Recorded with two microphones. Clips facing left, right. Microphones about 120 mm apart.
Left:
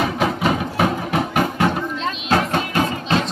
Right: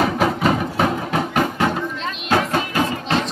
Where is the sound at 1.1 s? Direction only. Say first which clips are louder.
Even; 15° left (ahead or behind).